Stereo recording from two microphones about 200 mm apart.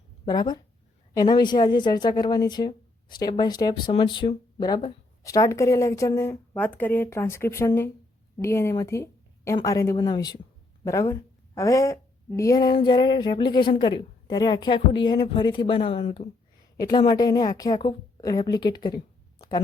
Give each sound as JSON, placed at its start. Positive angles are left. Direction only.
{"t": 0.3, "sound": "a woman's voice", "side_deg": 20}
{"t": 16.7, "sound": "a woman's voice", "side_deg": 20}
{"t": 19.4, "sound": "a sound", "side_deg": 20}